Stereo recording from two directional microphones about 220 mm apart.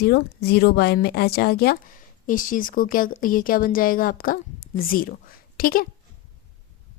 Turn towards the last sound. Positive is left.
turn(degrees=40)  # may be behind; listen again after turning